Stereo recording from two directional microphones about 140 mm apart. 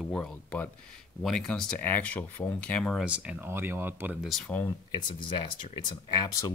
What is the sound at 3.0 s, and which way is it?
Speech, 10° right (ahead or behind).